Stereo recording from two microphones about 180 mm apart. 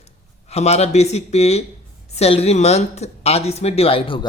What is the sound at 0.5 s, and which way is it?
A woman's voice, 35° left (ahead or behind).